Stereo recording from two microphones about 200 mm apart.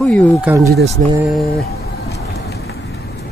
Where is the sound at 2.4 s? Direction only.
50° left (ahead or behind).